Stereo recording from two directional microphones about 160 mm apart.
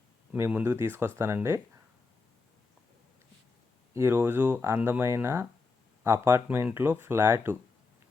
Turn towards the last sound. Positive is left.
turn(degrees=-15)  # may be behind; listen again after turning